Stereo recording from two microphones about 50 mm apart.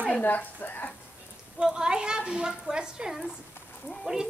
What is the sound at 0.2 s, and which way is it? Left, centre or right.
Speech, left.